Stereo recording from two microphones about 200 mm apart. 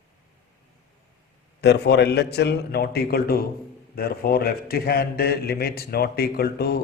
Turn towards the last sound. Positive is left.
turn(degrees=50)  # may be behind; listen again after turning